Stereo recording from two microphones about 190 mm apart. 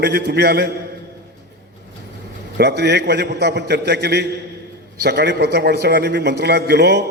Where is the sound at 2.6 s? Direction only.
60° right (ahead or behind).